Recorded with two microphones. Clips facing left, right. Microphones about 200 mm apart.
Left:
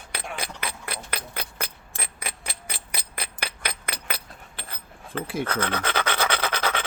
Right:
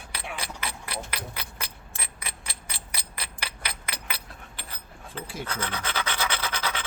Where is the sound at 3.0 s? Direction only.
55° left (ahead or behind).